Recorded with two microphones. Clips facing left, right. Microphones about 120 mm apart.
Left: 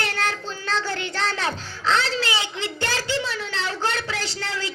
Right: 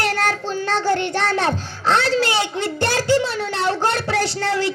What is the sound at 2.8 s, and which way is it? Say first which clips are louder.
Speech: right 9 dB; 40° right (ahead or behind).